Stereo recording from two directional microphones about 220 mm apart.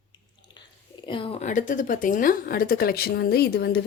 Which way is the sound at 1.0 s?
25° left (ahead or behind).